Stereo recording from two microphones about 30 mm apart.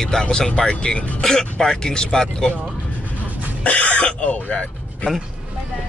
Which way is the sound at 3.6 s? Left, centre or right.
Left.